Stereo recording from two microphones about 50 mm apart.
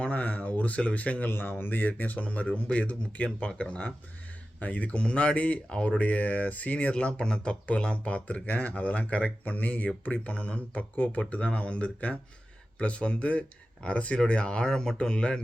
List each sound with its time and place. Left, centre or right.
0.0 s speech: left
1.3 s speech: left
1.9 s speech: left